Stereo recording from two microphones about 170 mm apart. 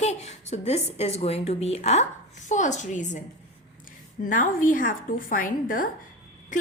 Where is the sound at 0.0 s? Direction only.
40° left (ahead or behind).